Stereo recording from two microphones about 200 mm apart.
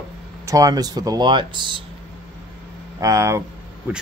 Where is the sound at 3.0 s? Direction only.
15° right (ahead or behind).